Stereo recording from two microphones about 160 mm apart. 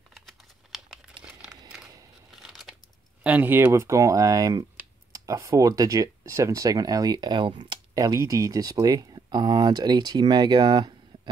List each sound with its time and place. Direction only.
0.1 s typing: centre (ahead or behind)
1.2 s a sound: 5° right (ahead or behind)
2.3 s crumpling: centre (ahead or behind)
3.3 s speech: 10° right (ahead or behind); by 11.0 s 25° right (ahead or behind)